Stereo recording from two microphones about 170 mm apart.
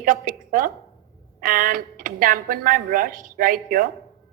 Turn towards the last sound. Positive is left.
turn(degrees=-55)  # may be behind; listen again after turning